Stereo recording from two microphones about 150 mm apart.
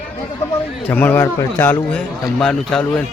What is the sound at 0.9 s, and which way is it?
A man's voice, 10° left (ahead or behind).